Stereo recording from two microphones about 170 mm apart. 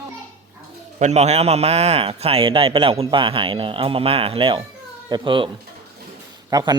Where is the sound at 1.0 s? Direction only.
40° right (ahead or behind).